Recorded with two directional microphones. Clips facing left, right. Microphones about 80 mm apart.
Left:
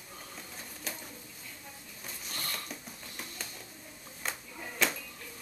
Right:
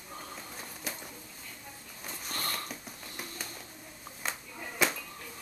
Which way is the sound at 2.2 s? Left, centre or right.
Right.